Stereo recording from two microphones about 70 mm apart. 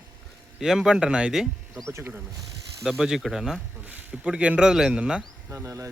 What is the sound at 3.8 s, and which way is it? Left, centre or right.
Speech, right.